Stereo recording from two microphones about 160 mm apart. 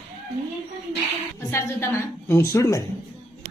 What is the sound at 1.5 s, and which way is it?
A woman's voice, 15° left (ahead or behind).